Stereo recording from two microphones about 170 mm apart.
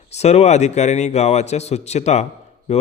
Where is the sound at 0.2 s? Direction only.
40° left (ahead or behind).